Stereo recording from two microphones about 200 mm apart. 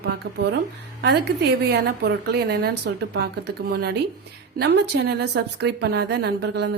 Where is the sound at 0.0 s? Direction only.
55° right (ahead or behind).